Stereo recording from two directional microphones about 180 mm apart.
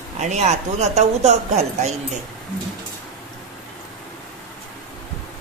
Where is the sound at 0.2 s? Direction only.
40° right (ahead or behind).